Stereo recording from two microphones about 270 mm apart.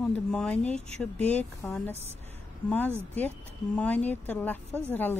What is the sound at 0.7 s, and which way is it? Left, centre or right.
Speech, right.